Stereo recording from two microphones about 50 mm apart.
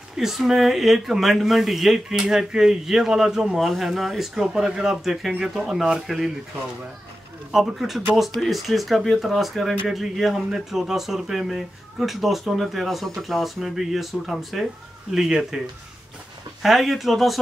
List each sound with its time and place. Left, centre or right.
0.1 s speech: centre
7.5 s speech: centre
16.6 s speech: centre